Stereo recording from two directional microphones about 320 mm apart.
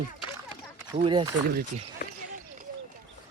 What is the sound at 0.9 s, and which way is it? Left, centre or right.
Speech, centre.